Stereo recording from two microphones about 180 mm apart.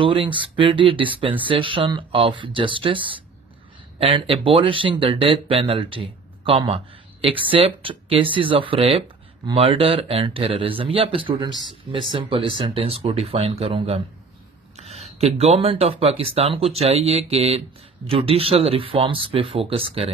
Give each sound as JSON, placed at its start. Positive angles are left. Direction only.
{"t": 0.0, "sound": "speech", "side_deg": -30}